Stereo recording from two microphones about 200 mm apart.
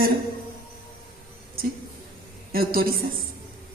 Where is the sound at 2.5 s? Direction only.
45° right (ahead or behind).